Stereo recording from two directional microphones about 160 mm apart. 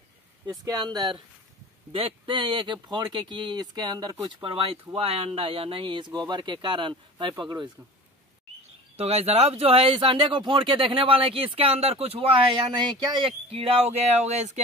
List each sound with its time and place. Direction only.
0.5 s speech: 25° right (ahead or behind)
8.9 s speech: 40° right (ahead or behind)